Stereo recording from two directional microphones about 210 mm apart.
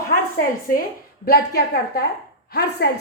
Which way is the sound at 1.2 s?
50° left (ahead or behind).